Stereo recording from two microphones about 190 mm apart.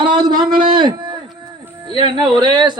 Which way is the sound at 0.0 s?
25° right (ahead or behind).